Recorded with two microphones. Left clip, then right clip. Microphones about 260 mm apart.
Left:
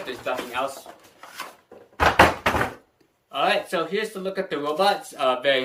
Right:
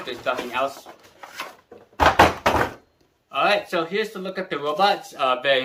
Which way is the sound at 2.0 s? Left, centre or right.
Right.